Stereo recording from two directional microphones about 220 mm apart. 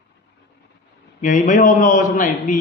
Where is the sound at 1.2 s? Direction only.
35° left (ahead or behind).